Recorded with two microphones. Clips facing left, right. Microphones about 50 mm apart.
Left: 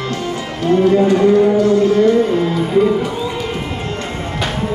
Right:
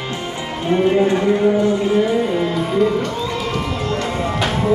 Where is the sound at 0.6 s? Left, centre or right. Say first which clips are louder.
Left 3 dB; right; by 2.9 s centre.